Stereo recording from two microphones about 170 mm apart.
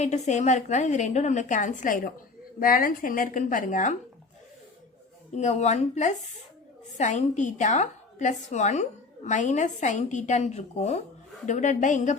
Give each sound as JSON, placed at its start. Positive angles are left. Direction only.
{"t": 0.0, "sound": "a woman's voice", "side_deg": 45}
{"t": 5.3, "sound": "a woman's voice", "side_deg": 40}